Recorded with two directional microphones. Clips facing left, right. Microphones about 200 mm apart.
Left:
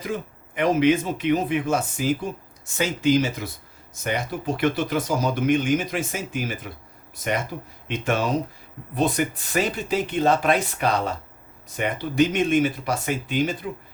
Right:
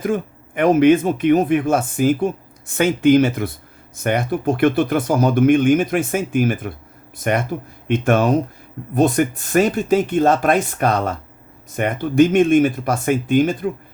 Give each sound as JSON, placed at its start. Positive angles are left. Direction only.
{"t": 0.0, "sound": "speech", "side_deg": -50}